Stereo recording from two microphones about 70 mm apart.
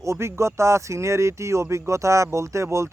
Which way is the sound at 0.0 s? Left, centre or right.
Right.